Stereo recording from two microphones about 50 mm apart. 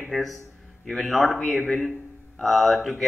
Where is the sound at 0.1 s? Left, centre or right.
Centre.